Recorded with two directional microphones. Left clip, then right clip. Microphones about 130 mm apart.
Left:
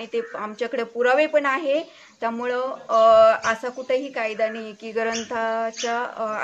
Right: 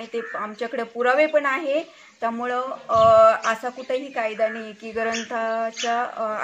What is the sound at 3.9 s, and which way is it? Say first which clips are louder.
Speech: left 2 dB; 35° left (ahead or behind).